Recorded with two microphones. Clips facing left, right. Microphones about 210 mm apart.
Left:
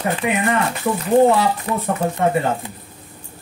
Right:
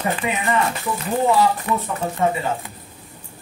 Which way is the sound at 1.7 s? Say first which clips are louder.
Even; 40° left (ahead or behind).